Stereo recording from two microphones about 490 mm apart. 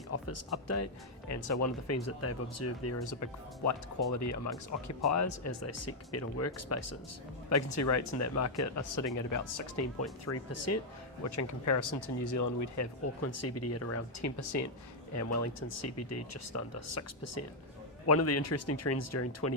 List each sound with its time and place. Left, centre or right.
0.1 s speech: left